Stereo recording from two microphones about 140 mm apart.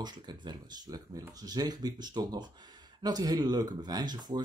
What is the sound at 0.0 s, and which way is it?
Speech, 30° right (ahead or behind).